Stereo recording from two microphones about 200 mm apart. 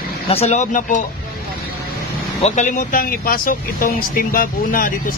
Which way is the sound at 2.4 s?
35° left (ahead or behind).